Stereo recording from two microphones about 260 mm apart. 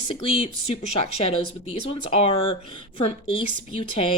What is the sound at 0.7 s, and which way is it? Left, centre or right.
Speech, left.